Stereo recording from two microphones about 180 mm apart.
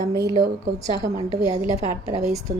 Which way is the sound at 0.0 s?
20° right (ahead or behind).